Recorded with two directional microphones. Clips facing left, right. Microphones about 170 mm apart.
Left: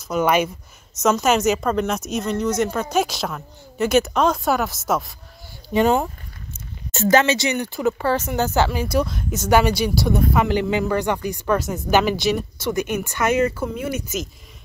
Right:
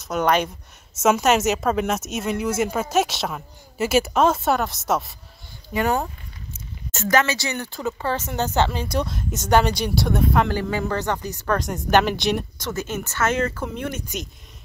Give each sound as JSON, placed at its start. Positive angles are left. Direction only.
{"t": 0.0, "sound": "speech", "side_deg": 0}
{"t": 5.7, "sound": "speech", "side_deg": 20}
{"t": 10.5, "sound": "speech", "side_deg": 20}